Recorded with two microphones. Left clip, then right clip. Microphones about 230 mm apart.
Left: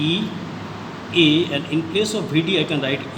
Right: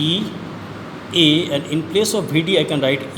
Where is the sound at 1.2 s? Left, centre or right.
Right.